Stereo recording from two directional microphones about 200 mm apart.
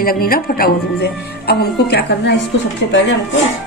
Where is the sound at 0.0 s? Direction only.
45° left (ahead or behind).